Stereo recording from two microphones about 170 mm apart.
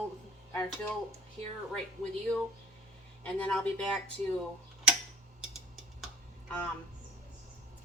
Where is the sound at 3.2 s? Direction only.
5° left (ahead or behind).